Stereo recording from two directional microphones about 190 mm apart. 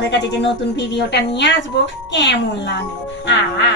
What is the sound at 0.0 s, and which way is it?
A woman's voice, 65° left (ahead or behind).